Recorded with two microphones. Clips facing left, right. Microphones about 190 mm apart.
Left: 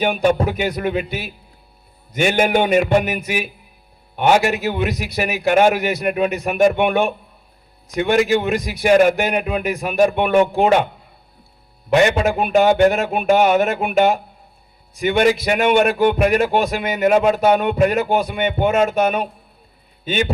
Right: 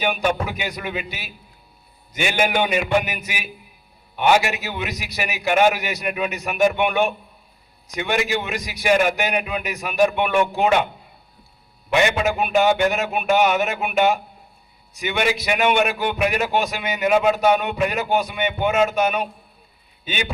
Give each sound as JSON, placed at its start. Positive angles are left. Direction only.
{"t": 0.4, "sound": "a man's voice", "side_deg": 50}
{"t": 11.9, "sound": "a man's voice", "side_deg": 40}